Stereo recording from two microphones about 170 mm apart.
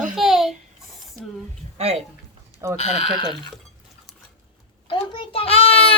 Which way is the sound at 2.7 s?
35° left (ahead or behind).